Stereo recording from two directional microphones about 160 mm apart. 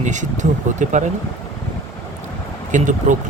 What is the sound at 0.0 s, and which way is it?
Speech, 50° right (ahead or behind).